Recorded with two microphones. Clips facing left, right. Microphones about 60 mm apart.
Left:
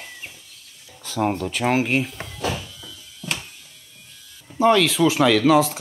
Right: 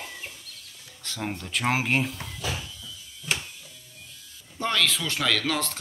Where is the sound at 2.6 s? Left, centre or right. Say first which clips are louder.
Left 2 dB; left.